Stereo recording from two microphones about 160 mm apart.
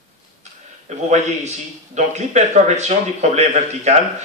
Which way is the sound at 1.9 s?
45° right (ahead or behind).